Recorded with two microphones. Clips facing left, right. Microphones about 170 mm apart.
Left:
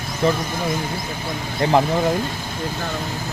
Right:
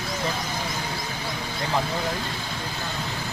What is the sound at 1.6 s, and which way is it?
Speech, 75° left (ahead or behind).